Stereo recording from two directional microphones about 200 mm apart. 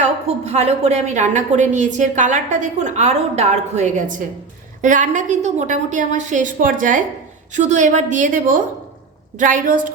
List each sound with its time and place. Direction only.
0.0 s a woman's voice: 35° right (ahead or behind)